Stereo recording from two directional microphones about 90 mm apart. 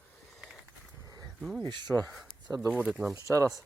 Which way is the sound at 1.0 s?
45° right (ahead or behind).